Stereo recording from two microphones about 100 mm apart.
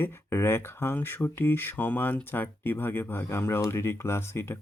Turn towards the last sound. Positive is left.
turn(degrees=25)  # may be behind; listen again after turning